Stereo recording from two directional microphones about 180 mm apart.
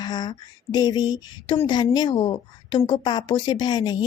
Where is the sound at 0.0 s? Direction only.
25° left (ahead or behind).